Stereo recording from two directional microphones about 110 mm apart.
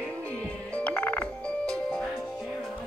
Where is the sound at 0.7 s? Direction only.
10° left (ahead or behind).